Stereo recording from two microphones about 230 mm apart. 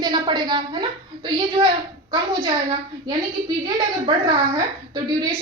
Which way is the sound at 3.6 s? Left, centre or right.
Centre.